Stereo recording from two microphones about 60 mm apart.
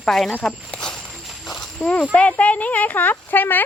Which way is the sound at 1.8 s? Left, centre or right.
Left.